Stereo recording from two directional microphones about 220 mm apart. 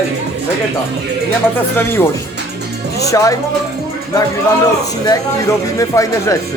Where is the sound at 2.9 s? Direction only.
15° left (ahead or behind).